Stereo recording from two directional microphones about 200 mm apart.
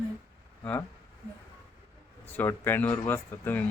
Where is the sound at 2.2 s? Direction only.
10° left (ahead or behind).